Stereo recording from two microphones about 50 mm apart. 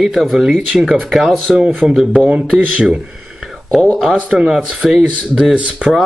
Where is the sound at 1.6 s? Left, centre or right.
Right.